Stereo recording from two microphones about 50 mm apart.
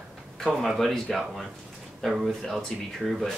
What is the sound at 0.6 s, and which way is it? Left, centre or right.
Speech, centre.